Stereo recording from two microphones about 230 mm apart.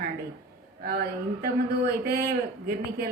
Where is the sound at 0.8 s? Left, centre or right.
Right.